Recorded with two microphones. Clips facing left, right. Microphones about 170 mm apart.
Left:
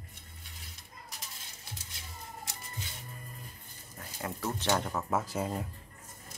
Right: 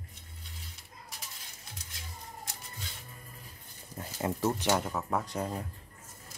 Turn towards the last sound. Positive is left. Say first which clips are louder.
# left 1 dB
turn(degrees=5)  # may be behind; listen again after turning